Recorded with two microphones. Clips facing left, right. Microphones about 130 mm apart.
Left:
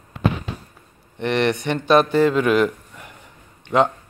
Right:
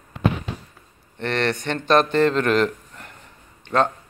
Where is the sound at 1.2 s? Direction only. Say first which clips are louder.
Left 3 dB; 15° left (ahead or behind).